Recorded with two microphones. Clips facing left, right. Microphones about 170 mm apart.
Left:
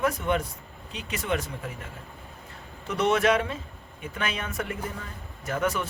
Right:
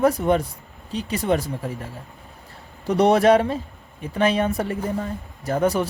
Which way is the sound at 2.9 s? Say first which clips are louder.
Right 7 dB; 35° right (ahead or behind).